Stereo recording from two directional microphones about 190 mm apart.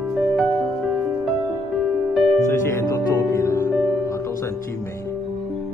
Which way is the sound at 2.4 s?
15° left (ahead or behind).